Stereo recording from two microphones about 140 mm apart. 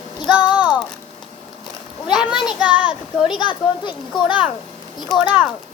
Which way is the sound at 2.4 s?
35° left (ahead or behind).